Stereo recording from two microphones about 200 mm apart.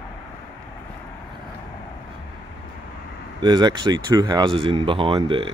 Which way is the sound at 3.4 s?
20° right (ahead or behind).